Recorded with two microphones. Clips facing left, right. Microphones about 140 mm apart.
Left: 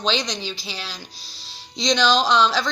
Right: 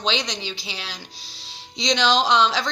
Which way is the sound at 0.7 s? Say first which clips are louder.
Left 1 dB; 20° right (ahead or behind).